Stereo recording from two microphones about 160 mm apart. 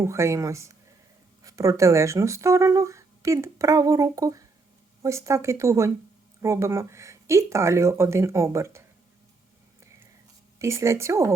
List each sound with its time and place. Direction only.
0.0 s speech: 20° right (ahead or behind)
10.6 s speech: 15° right (ahead or behind)